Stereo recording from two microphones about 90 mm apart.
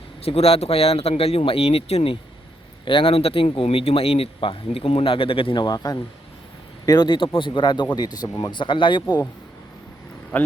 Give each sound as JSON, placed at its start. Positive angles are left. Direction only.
{"t": 0.3, "sound": "speech", "side_deg": 90}
{"t": 2.8, "sound": "speech", "side_deg": 80}
{"t": 5.5, "sound": "a man's voice", "side_deg": 50}